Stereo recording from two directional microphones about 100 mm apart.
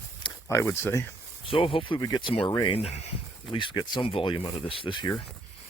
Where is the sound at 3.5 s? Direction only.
60° left (ahead or behind).